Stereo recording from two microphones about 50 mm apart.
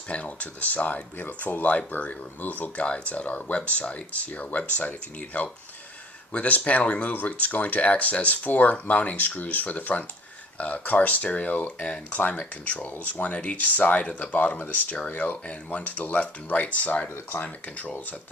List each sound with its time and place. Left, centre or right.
0.1 s speech: left
2.8 s speech: left